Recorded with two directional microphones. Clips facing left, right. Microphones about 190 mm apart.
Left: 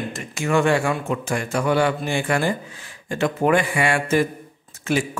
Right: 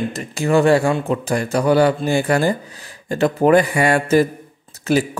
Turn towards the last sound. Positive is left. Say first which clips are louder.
# right 5 dB
turn(degrees=-40)  # may be behind; listen again after turning